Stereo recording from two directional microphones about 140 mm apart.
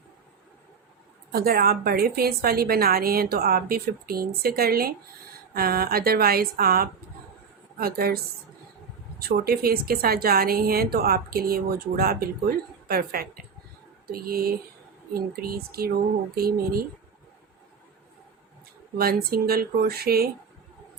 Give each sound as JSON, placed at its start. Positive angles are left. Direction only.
{"t": 1.3, "sound": "a woman's voice", "side_deg": -90}
{"t": 9.2, "sound": "a woman's voice", "side_deg": -90}
{"t": 18.9, "sound": "a woman's voice", "side_deg": -90}